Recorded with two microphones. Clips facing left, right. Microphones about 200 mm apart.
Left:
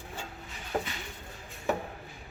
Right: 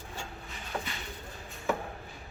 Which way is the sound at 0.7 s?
40° left (ahead or behind).